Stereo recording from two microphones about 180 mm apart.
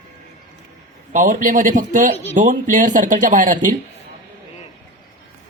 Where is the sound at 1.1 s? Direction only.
45° right (ahead or behind).